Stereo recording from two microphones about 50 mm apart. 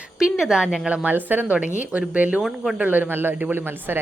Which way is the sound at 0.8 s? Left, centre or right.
Right.